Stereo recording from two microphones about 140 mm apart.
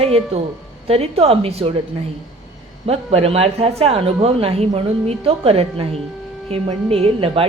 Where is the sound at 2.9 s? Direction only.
45° right (ahead or behind).